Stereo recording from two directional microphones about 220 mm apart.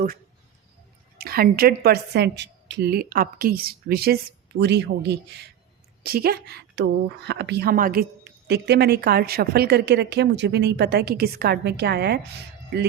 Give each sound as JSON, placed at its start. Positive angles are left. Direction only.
{"t": 1.2, "sound": "speech", "side_deg": -45}